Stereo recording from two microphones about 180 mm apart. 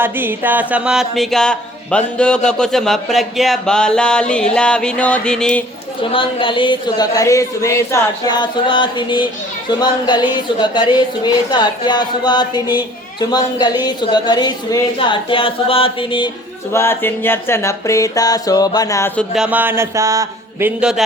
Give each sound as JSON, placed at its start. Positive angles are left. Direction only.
{"t": 0.0, "sound": "speech", "side_deg": -10}
{"t": 6.0, "sound": "speech", "side_deg": 30}
{"t": 16.7, "sound": "a sound", "side_deg": 15}
{"t": 19.3, "sound": "a man's voice", "side_deg": -5}